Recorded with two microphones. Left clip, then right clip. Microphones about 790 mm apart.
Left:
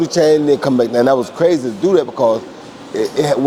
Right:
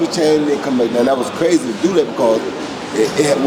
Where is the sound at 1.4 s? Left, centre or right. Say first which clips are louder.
Left 1 dB; left.